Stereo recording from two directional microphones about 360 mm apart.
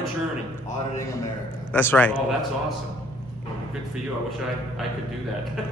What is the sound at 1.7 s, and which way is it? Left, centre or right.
Speech, centre.